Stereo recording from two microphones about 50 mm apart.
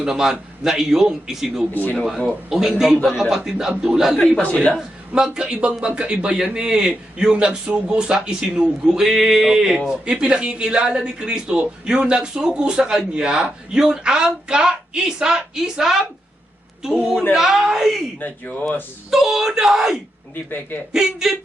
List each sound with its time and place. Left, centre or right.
0.0 s a man's voice: centre
1.7 s speech: left
2.5 s a man's voice: centre
4.5 s a man's voice: left
5.1 s a man's voice: centre
9.0 s a man's voice: centre
18.2 s speech: left
19.1 s a man's voice: centre
20.3 s speech: left
20.9 s a man's voice: centre